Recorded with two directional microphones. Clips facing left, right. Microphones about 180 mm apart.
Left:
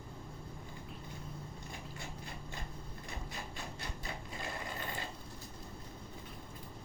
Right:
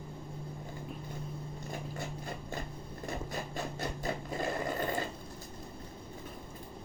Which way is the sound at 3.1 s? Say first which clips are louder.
Right 9 dB; 45° right (ahead or behind).